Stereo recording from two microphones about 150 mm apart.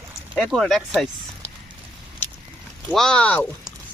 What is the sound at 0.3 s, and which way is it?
Speech, centre (ahead or behind).